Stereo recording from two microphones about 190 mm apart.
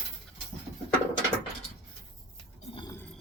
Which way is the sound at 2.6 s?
35° left (ahead or behind).